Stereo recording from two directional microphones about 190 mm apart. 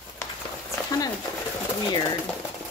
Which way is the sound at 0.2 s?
15° left (ahead or behind).